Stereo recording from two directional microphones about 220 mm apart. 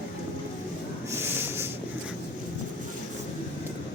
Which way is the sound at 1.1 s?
10° right (ahead or behind).